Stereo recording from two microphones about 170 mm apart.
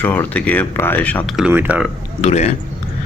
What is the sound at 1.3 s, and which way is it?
Speech, 10° right (ahead or behind).